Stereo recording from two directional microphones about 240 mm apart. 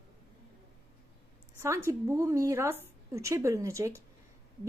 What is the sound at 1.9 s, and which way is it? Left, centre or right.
A woman's voice, centre.